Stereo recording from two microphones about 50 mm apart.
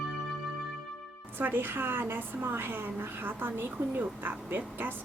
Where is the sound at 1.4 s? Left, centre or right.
Right.